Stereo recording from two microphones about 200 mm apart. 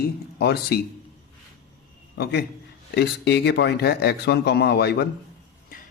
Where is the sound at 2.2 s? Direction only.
55° left (ahead or behind).